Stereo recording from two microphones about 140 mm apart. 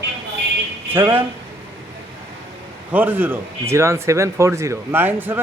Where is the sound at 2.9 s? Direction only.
15° right (ahead or behind).